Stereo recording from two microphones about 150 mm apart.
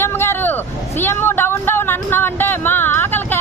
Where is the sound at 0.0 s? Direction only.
15° left (ahead or behind).